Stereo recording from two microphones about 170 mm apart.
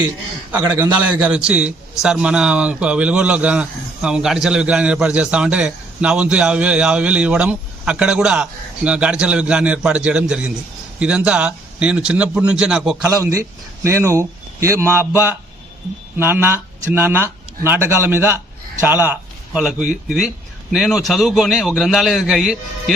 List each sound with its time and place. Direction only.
0.5 s a man's voice: 15° right (ahead or behind)
13.1 s a man's voice: 20° right (ahead or behind)
16.1 s a man's voice: 10° right (ahead or behind)
19.5 s a man's voice: 5° right (ahead or behind)